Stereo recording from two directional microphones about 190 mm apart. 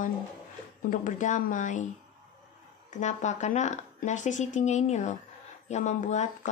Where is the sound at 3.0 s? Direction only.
40° left (ahead or behind).